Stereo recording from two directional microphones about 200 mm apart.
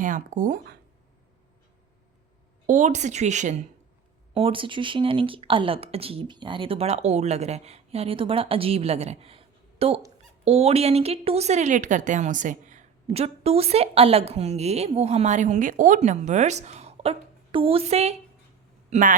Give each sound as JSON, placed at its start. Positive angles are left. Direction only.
{"t": 0.0, "sound": "a woman's voice", "side_deg": -40}
{"t": 2.6, "sound": "a woman's voice", "side_deg": -35}